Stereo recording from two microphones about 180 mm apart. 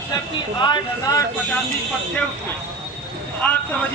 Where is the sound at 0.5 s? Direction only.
20° left (ahead or behind).